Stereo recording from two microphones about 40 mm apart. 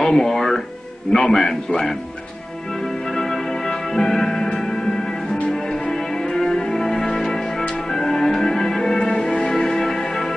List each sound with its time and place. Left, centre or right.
0.0 s music: centre
1.1 s speech: centre
3.1 s music: centre
5.5 s music: left
8.9 s music: left